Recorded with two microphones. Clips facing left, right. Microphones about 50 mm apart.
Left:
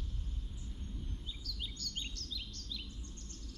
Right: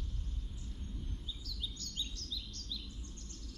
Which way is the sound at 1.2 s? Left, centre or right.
Left.